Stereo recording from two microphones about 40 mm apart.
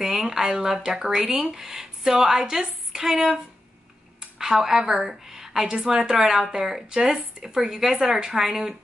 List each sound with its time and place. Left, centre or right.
0.3 s a woman's voice: centre
4.4 s speech: centre
5.2 s a sound: centre
5.7 s speech: right